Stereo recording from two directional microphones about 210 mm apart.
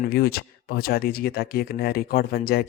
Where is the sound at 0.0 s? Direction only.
45° left (ahead or behind).